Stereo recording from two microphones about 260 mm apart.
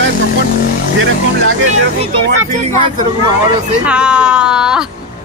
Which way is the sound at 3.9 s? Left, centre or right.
Centre.